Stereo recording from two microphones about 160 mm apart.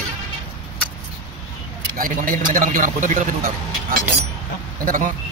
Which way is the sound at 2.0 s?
55° right (ahead or behind).